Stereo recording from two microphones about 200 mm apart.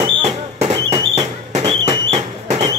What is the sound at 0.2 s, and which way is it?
Fireworks, 30° right (ahead or behind).